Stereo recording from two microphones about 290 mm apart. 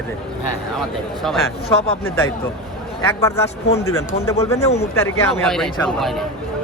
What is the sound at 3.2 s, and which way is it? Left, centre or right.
Speech, centre.